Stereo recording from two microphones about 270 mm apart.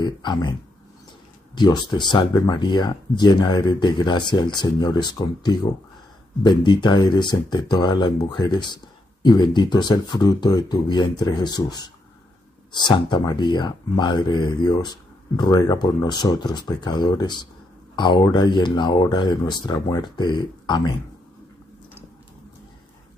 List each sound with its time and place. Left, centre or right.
0.0 s speech: centre